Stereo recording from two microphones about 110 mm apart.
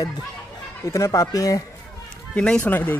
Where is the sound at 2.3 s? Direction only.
10° left (ahead or behind).